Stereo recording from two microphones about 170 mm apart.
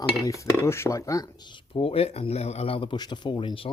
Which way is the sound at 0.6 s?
15° left (ahead or behind).